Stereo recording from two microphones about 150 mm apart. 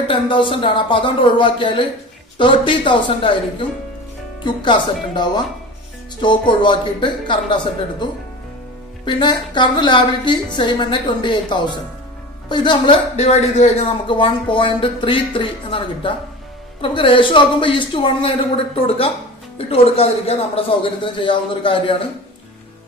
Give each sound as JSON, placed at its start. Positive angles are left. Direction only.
{"t": 0.1, "sound": "a man's voice", "side_deg": 35}
{"t": 13.1, "sound": "a man's voice", "side_deg": 45}